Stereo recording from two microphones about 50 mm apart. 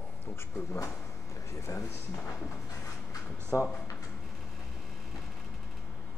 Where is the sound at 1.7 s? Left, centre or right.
Left.